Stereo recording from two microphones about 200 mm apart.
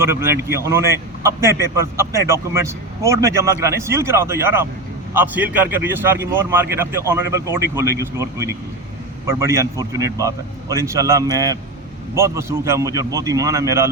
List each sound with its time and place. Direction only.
0.0 s speech: 15° right (ahead or behind)